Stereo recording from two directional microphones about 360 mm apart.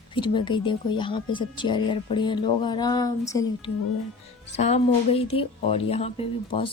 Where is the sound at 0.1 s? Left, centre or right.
Centre.